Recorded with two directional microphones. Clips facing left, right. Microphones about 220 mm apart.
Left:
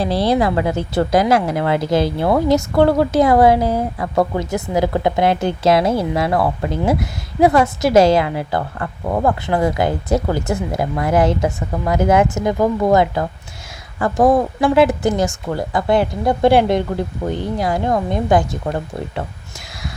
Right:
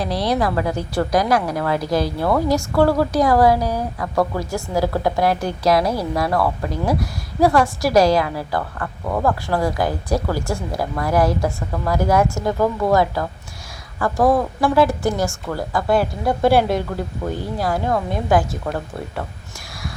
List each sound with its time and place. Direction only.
0.0 s a woman's voice: 25° left (ahead or behind)